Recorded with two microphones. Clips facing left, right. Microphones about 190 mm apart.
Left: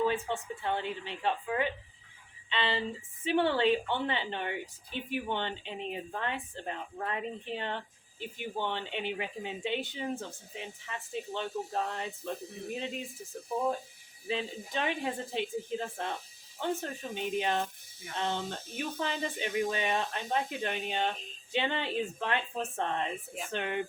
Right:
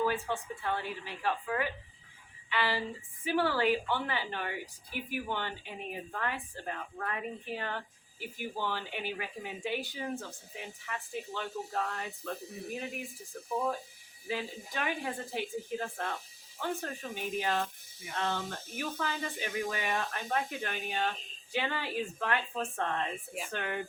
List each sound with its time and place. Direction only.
0.3 s speech: 25° left (ahead or behind)